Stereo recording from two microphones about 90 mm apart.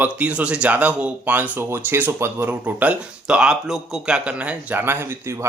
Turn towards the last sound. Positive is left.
turn(degrees=-25)  # may be behind; listen again after turning